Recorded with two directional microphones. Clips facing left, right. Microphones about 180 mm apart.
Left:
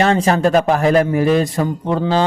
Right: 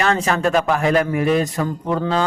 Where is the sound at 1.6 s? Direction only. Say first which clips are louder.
Left 3 dB; 30° left (ahead or behind).